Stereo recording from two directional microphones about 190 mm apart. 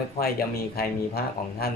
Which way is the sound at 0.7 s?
55° left (ahead or behind).